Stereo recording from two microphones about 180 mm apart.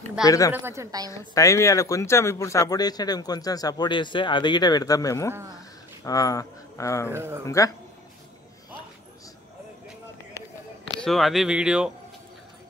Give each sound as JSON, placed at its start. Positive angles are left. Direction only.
{"t": 0.2, "sound": "speech", "side_deg": 20}
{"t": 0.5, "sound": "a woman's voice", "side_deg": -10}
{"t": 1.1, "sound": "speech", "side_deg": 15}
{"t": 7.1, "sound": "a woman's voice", "side_deg": -15}
{"t": 7.4, "sound": "speech", "side_deg": 15}
{"t": 11.1, "sound": "speech", "side_deg": 0}